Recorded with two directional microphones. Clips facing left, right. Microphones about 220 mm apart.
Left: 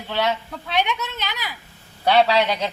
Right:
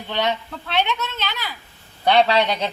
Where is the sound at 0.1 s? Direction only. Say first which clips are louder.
Even; 5° left (ahead or behind).